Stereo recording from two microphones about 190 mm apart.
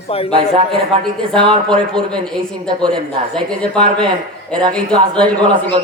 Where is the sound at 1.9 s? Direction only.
5° left (ahead or behind).